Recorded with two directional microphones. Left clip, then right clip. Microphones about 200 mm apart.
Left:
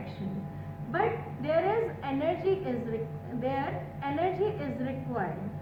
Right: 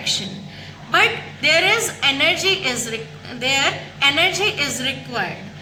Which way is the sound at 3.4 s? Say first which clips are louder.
Right 14 dB; 55° right (ahead or behind).